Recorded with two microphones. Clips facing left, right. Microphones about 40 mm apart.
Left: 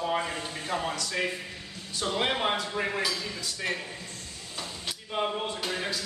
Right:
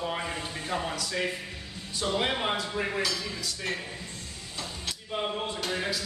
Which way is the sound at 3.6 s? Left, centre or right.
Centre.